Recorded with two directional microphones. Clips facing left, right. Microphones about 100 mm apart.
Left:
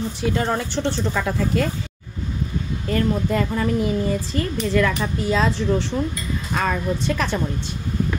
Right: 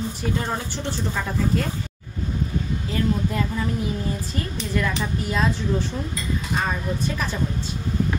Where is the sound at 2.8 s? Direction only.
60° left (ahead or behind).